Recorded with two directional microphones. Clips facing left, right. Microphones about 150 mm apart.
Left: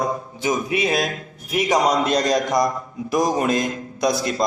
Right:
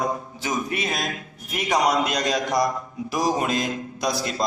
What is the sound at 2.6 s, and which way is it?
A man's voice, 50° left (ahead or behind).